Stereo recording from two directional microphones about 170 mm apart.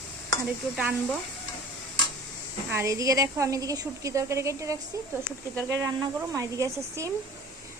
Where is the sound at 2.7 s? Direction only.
15° right (ahead or behind).